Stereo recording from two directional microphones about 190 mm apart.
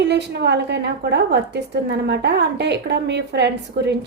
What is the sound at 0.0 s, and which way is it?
A woman's voice, 60° right (ahead or behind).